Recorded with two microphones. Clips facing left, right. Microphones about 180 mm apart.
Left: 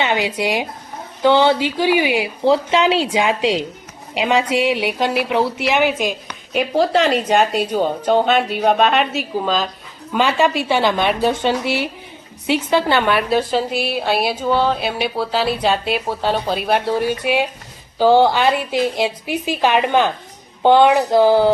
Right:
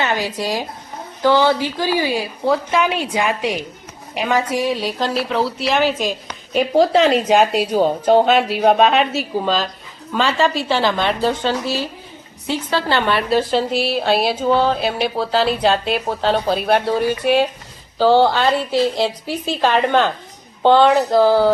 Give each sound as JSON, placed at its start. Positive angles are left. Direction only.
{"t": 0.0, "sound": "a woman's voice", "side_deg": 20}
{"t": 10.1, "sound": "a woman's voice", "side_deg": 10}